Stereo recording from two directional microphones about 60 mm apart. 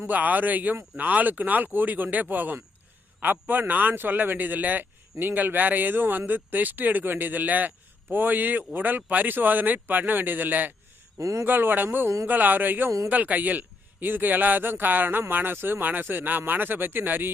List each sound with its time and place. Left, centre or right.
0.1 s speech: right
11.2 s speech: right
11.4 s speech: right
12.0 s speech: right
12.3 s speech: right